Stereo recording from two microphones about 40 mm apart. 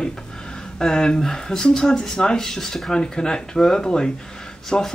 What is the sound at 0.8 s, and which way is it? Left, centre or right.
Speech, centre.